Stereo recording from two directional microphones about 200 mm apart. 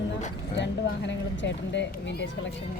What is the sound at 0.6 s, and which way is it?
Speech, 60° left (ahead or behind).